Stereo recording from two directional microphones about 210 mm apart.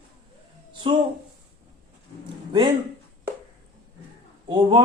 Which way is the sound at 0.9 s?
25° right (ahead or behind).